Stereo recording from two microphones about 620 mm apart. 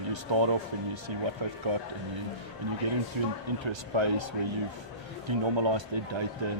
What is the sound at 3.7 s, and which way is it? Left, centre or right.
Speech, right.